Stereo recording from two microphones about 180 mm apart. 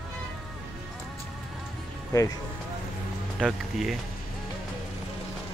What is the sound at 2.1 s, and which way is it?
Speech, 15° left (ahead or behind).